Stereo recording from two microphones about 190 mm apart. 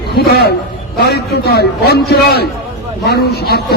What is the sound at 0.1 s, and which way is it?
A man's voice, 55° left (ahead or behind).